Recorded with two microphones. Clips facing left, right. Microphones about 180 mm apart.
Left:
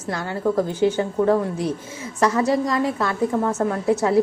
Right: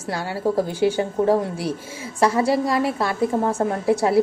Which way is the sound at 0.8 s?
10° right (ahead or behind).